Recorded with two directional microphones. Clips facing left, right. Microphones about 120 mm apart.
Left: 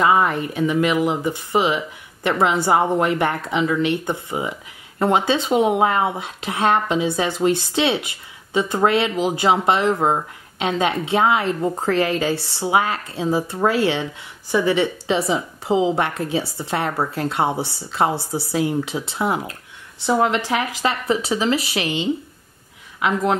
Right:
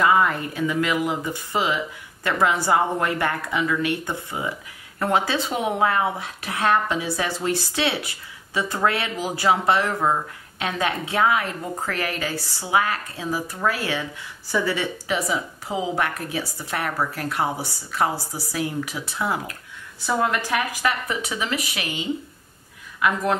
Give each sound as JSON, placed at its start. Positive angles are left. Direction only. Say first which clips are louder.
{"t": 0.0, "sound": "a woman's voice", "louder": "left 2 dB", "side_deg": 20}